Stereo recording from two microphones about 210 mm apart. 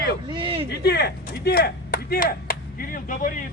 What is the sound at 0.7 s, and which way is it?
Chop, 50° left (ahead or behind).